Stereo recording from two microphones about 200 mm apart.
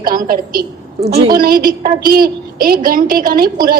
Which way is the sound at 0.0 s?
45° right (ahead or behind).